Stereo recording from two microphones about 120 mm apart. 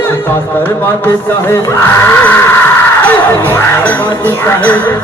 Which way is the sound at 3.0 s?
15° left (ahead or behind).